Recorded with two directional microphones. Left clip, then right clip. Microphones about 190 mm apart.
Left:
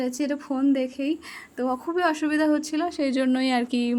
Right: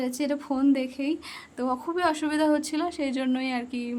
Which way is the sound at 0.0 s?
10° left (ahead or behind).